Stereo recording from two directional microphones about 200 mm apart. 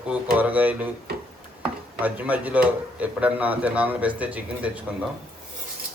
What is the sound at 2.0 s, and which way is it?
A man's voice, 10° right (ahead or behind).